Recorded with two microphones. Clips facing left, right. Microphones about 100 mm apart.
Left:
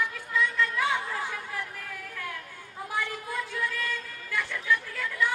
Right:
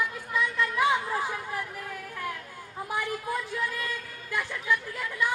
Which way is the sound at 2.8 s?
20° right (ahead or behind).